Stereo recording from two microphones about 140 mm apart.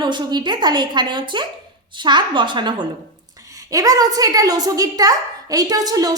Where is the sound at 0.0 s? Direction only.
30° right (ahead or behind).